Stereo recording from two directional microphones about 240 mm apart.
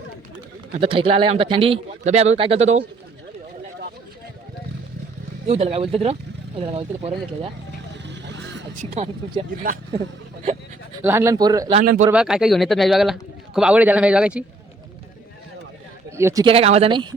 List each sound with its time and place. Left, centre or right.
0.8 s speech: right
5.5 s speech: right
8.0 s vehicle: right
8.8 s speech: right
11.0 s speech: centre
11.8 s speech: right
12.1 s speech: centre
16.1 s speech: centre